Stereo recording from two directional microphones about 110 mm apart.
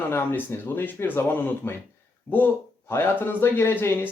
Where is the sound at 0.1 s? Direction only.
20° left (ahead or behind).